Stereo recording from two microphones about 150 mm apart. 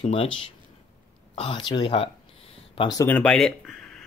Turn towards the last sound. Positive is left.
turn(degrees=0)  # may be behind; listen again after turning